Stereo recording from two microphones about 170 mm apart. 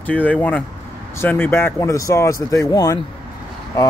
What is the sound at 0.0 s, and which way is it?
Speech, 10° left (ahead or behind).